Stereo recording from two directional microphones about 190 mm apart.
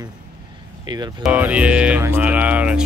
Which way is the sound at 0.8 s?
20° right (ahead or behind).